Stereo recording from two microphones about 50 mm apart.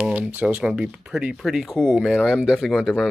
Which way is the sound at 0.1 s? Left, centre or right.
Right.